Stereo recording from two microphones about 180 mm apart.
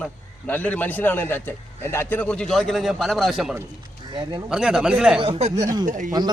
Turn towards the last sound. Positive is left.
turn(degrees=-45)  # may be behind; listen again after turning